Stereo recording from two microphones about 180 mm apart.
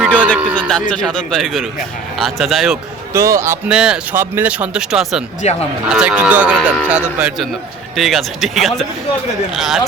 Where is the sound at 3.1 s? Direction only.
15° right (ahead or behind).